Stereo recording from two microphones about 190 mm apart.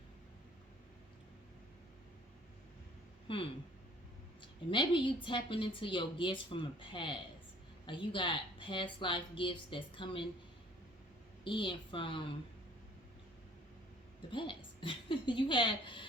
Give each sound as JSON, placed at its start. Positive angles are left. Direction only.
{"t": 3.3, "sound": "a woman's voice", "side_deg": 30}
{"t": 4.7, "sound": "a woman's voice", "side_deg": 25}
{"t": 11.4, "sound": "a woman's voice", "side_deg": 25}
{"t": 14.3, "sound": "a woman's voice", "side_deg": 25}